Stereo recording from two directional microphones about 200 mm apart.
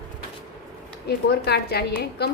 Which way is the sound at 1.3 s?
55° left (ahead or behind).